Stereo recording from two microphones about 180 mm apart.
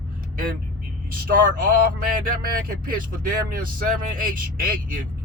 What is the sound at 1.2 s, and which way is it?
A man's voice, 50° right (ahead or behind).